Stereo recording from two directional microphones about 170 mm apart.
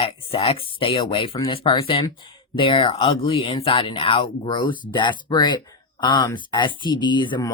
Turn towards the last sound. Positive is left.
turn(degrees=25)  # may be behind; listen again after turning